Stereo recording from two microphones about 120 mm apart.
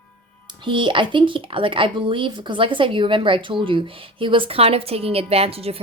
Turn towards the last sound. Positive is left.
turn(degrees=-55)  # may be behind; listen again after turning